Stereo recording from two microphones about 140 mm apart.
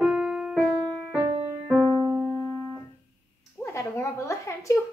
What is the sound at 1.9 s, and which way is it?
Keyboard, 30° right (ahead or behind).